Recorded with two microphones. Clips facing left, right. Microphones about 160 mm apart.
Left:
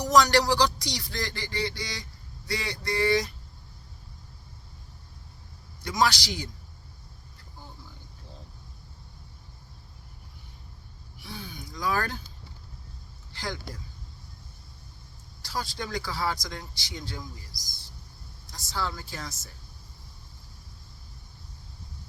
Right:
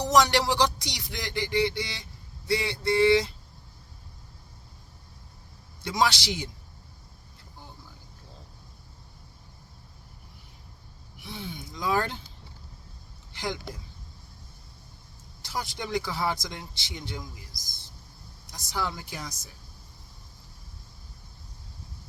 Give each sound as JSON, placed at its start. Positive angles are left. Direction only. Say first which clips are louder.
{"t": 0.0, "sound": "speech", "louder": "left 1 dB", "side_deg": -25}
{"t": 5.8, "sound": "speech", "louder": "even", "side_deg": -25}
{"t": 11.2, "sound": "a sound", "louder": "right 2 dB", "side_deg": -20}
{"t": 13.3, "sound": "speech", "louder": "right 3 dB", "side_deg": -20}
{"t": 15.4, "sound": "speech", "louder": "even", "side_deg": -20}